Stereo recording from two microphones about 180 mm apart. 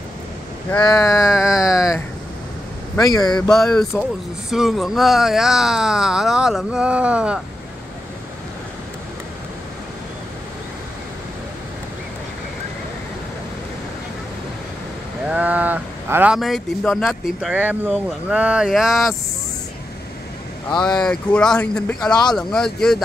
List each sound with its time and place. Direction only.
0.8 s speech: 20° left (ahead or behind)
1.1 s speech: centre (ahead or behind)
3.2 s speech: 5° left (ahead or behind)
15.2 s speech: 5° right (ahead or behind)
20.7 s speech: 5° left (ahead or behind)
22.0 s speech: 20° left (ahead or behind)
22.3 s speech: 5° left (ahead or behind)